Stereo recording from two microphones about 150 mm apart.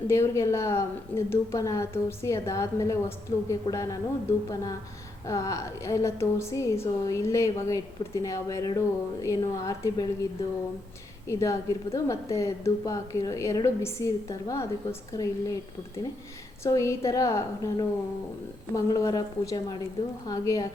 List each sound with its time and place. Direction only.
0.1 s a woman's voice: 20° left (ahead or behind)
11.3 s a woman's voice: 20° left (ahead or behind)
16.6 s a woman's voice: 20° left (ahead or behind)